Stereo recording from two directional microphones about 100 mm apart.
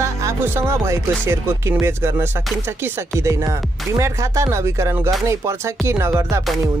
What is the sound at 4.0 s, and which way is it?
Speech, 30° right (ahead or behind).